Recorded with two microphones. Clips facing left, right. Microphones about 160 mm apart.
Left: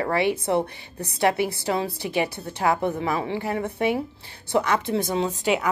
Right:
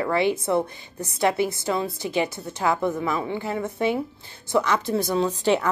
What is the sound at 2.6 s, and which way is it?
A woman's voice, 25° left (ahead or behind).